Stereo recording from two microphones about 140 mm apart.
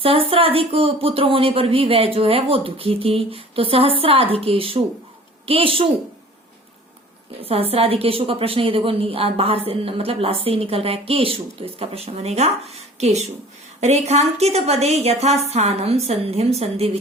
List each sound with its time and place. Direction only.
0.0 s speech: 45° right (ahead or behind)
7.4 s a woman's voice: 45° right (ahead or behind)